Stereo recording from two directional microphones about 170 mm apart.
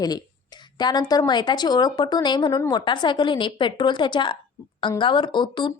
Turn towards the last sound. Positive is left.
turn(degrees=30)  # may be behind; listen again after turning